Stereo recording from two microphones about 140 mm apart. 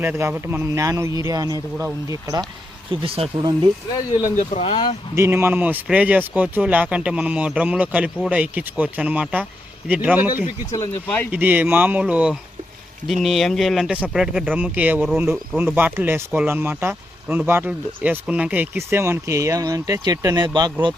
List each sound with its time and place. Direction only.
0.0 s a man's voice: 15° right (ahead or behind)
2.9 s speech: 40° right (ahead or behind)
4.4 s speech: 45° left (ahead or behind)
5.1 s speech: 20° right (ahead or behind)
10.7 s speech: 20° left (ahead or behind)
11.3 s speech: 10° right (ahead or behind); by 20.7 s 30° right (ahead or behind)